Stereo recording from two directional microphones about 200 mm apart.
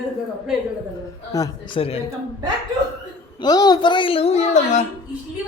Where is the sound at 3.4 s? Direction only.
20° left (ahead or behind).